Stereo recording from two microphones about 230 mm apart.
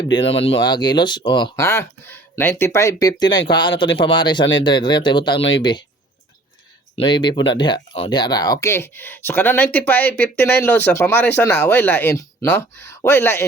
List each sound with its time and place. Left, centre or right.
0.3 s speech: left
6.9 s speech: centre